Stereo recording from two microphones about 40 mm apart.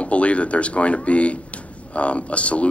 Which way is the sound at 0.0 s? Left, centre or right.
Left.